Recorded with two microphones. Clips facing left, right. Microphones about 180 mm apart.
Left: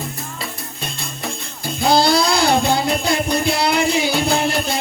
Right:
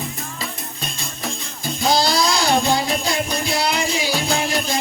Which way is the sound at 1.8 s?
60° left (ahead or behind).